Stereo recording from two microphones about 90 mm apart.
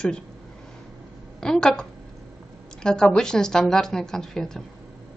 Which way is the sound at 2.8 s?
10° left (ahead or behind).